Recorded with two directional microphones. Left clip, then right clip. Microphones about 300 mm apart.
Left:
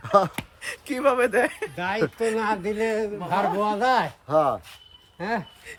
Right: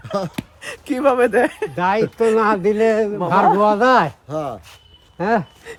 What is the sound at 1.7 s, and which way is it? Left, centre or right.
A man's voice, centre.